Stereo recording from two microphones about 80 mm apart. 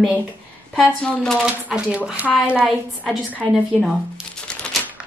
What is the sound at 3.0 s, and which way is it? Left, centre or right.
Speech, centre.